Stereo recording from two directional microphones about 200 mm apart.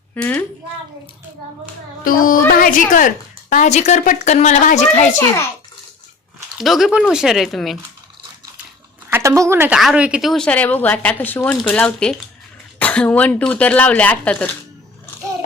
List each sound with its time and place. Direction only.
0.1 s a woman's voice: 10° left (ahead or behind)
2.0 s music: 45° left (ahead or behind)
2.5 s a woman's voice: 45° left (ahead or behind)
6.6 s a woman's voice: centre (ahead or behind)
9.0 s a woman's voice: 15° right (ahead or behind); by 14.5 s 5° left (ahead or behind)